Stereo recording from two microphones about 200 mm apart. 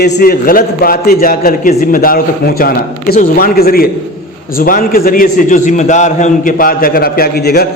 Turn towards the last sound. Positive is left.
turn(degrees=50)  # may be behind; listen again after turning